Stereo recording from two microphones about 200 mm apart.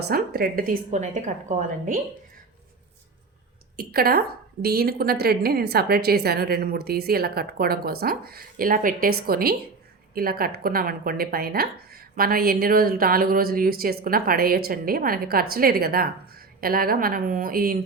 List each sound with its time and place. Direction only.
0.1 s a woman's voice: 50° right (ahead or behind)
3.8 s a woman's voice: 50° right (ahead or behind)